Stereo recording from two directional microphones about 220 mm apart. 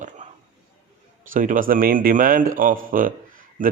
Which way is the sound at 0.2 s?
30° right (ahead or behind).